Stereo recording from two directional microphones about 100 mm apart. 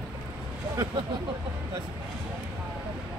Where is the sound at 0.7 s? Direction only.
35° right (ahead or behind).